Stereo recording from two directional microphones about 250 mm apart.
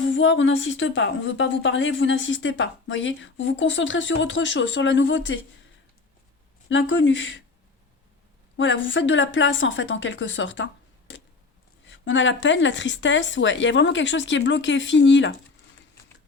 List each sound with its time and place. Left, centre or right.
0.1 s a woman's voice: left
6.7 s a woman's voice: left
8.5 s a woman's voice: left
11.9 s a woman's voice: left